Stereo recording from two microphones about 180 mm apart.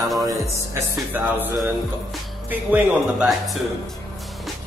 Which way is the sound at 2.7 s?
5° right (ahead or behind).